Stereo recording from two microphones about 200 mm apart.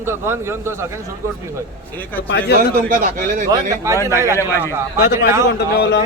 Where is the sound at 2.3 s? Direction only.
60° left (ahead or behind).